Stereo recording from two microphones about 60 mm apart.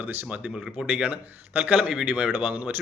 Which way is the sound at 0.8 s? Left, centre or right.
Right.